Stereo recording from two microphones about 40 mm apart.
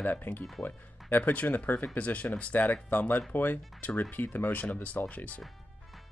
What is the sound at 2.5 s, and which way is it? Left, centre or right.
Speech, left.